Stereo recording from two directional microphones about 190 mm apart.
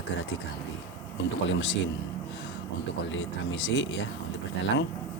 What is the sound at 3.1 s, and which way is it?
Speech, 80° left.